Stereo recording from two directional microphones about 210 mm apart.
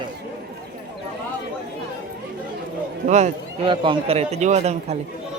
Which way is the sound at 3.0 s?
35° right (ahead or behind).